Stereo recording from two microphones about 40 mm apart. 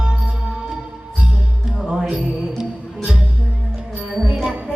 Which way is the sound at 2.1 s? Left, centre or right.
Centre.